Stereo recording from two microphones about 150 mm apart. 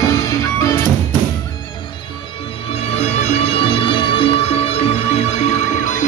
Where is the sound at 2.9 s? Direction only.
45° left (ahead or behind).